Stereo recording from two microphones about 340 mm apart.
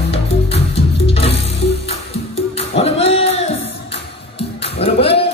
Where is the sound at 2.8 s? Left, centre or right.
Centre.